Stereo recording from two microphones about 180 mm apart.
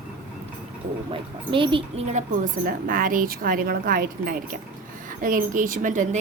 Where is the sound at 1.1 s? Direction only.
30° right (ahead or behind).